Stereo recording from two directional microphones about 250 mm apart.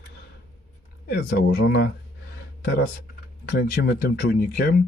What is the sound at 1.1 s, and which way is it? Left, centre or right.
Speech, left.